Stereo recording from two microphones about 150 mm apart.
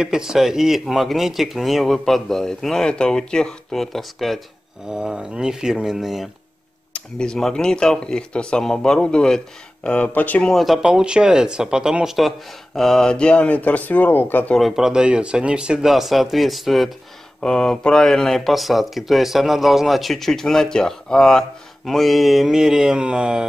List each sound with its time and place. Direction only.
0.0 s speech: 5° right (ahead or behind)